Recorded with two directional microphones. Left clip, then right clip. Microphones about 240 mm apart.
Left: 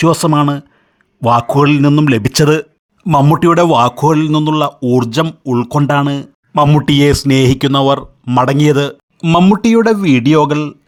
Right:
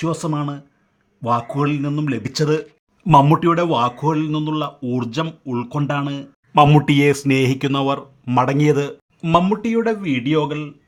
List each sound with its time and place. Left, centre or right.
0.0 s speech: left
6.5 s a man's voice: centre
9.3 s speech: left